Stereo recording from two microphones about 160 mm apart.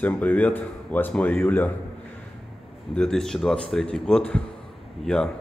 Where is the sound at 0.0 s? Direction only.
10° left (ahead or behind).